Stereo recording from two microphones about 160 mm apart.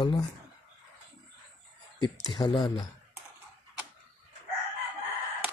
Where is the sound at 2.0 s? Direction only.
25° left (ahead or behind).